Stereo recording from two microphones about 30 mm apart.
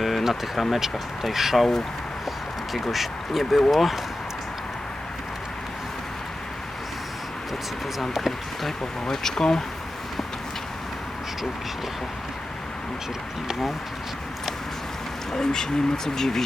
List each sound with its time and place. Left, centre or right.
0.0 s speech: centre
2.7 s speech: centre
9.0 s speech: centre
15.3 s speech: centre